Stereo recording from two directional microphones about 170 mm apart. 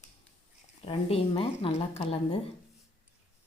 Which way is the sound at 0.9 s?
35° left (ahead or behind).